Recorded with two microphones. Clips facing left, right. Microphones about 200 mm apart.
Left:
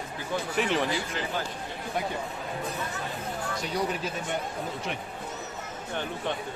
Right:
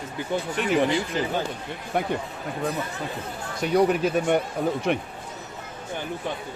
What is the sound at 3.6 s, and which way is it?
Speech, 60° right (ahead or behind).